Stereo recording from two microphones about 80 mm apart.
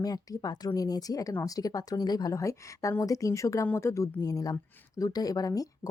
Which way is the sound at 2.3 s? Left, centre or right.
Left.